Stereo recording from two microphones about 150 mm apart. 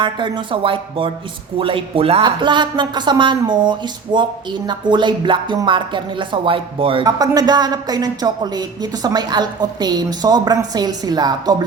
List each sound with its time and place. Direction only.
0.0 s speech: 35° right (ahead or behind)
7.0 s speech: 25° right (ahead or behind)